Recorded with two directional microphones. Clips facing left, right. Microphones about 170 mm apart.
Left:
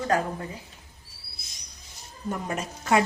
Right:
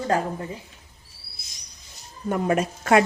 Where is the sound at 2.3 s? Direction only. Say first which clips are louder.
Right 8 dB; 65° right (ahead or behind).